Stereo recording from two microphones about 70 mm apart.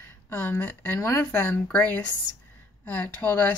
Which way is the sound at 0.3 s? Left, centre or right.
Left.